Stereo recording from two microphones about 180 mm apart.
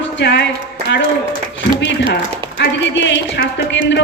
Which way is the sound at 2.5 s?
75° left (ahead or behind).